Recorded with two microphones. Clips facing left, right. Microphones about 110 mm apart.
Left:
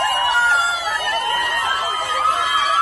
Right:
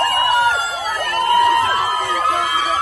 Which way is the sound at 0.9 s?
45° right (ahead or behind).